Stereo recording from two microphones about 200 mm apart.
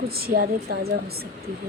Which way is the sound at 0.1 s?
50° right (ahead or behind).